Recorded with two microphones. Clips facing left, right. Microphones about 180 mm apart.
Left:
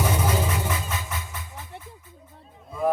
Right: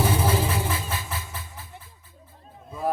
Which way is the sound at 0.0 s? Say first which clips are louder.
Right 1 dB; 30° right (ahead or behind).